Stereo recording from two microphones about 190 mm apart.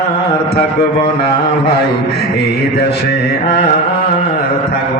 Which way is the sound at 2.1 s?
60° left (ahead or behind).